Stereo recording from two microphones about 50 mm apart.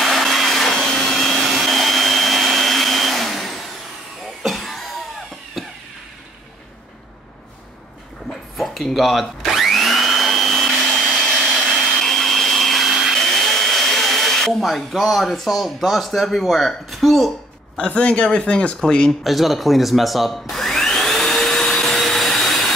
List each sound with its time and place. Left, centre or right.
0.0 s vacuum cleaner: centre
1.4 s vacuum cleaner: centre
4.4 s cough: centre
5.6 s a sound: centre
8.3 s blender: centre
11.3 s vacuum cleaner: centre
12.0 s vacuum cleaner: centre
13.1 s speech: centre
17.7 s speech: left
19.2 s vacuum cleaner: centre